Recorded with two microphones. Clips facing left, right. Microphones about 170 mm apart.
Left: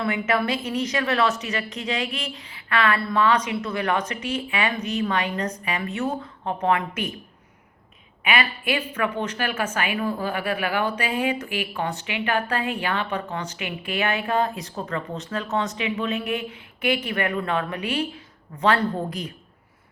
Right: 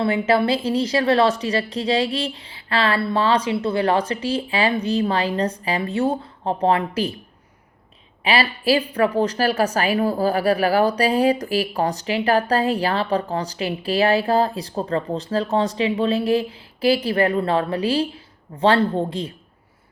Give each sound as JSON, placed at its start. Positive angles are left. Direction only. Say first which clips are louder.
{"t": 0.0, "sound": "a woman's voice", "louder": "right 5 dB", "side_deg": -30}
{"t": 8.2, "sound": "a woman's voice", "louder": "right 4 dB", "side_deg": -30}